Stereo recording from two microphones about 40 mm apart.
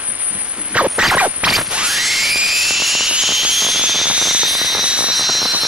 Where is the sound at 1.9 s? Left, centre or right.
Centre.